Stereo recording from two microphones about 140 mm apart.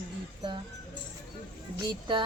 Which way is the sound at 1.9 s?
35° right (ahead or behind).